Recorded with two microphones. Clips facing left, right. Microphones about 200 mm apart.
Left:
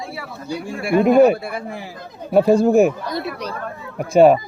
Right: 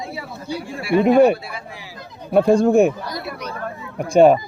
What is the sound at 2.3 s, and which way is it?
Speech, 5° left (ahead or behind).